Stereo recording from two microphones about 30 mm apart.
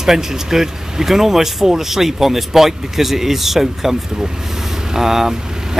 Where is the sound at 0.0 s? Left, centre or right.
Centre.